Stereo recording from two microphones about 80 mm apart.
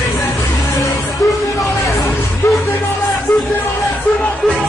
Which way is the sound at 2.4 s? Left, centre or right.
Left.